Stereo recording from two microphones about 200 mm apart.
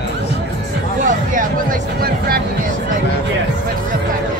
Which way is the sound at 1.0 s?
45° right (ahead or behind).